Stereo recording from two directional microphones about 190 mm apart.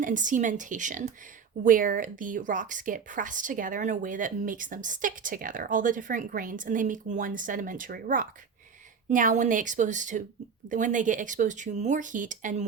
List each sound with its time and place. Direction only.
0.0 s a woman's voice: 40° right (ahead or behind)